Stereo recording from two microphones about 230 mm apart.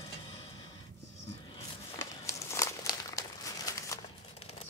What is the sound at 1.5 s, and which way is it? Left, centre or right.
Crumpling, centre.